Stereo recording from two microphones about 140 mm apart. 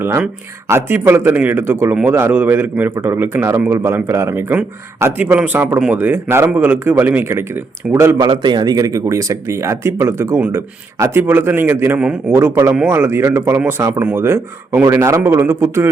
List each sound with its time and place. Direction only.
0.7 s a man's voice: 15° right (ahead or behind)
8.3 s a man's voice: 35° right (ahead or behind); by 15.9 s 15° right (ahead or behind)